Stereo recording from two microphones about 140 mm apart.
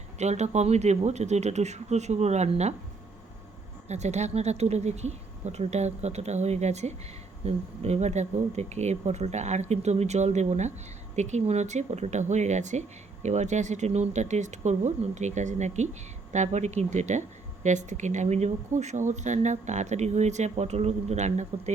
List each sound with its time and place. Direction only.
0.2 s speech: 55° right (ahead or behind)
3.8 s speech: 55° right (ahead or behind)